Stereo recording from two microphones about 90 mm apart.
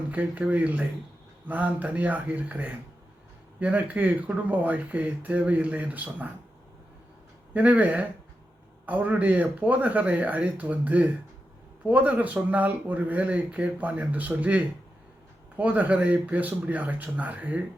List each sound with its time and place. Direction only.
0.1 s speech: 15° right (ahead or behind)
7.5 s speech: 15° right (ahead or behind)